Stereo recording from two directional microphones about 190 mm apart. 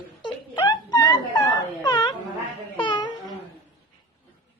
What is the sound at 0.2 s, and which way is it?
Whimper, 25° left (ahead or behind).